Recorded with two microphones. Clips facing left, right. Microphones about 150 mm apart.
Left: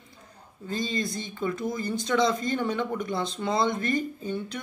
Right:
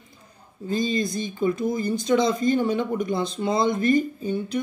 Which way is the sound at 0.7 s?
15° right (ahead or behind).